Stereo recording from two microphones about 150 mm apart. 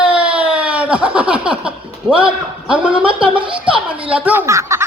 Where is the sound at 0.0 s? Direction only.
10° right (ahead or behind).